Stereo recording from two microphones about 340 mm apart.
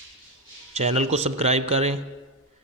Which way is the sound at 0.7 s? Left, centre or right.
Centre.